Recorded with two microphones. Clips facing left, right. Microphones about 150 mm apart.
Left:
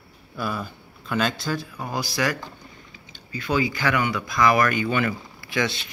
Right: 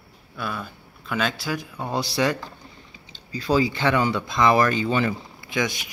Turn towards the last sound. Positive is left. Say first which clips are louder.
# even
turn(degrees=-15)  # may be behind; listen again after turning